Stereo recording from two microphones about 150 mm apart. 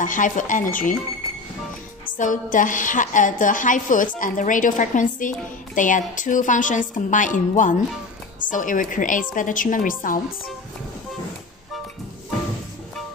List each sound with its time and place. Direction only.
0.0 s a woman's voice: 60° left (ahead or behind)
2.1 s a woman's voice: 60° left (ahead or behind)